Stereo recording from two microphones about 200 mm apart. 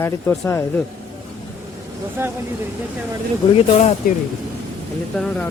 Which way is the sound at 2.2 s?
10° right (ahead or behind).